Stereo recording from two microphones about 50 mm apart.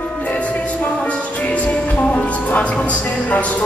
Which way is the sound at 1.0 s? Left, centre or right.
Left.